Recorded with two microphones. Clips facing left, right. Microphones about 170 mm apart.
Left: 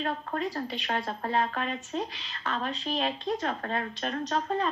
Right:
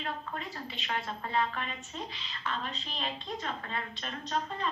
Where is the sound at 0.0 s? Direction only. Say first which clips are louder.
Left 7 dB; 45° left (ahead or behind).